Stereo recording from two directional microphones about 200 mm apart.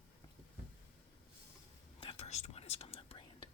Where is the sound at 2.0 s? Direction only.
30° left (ahead or behind).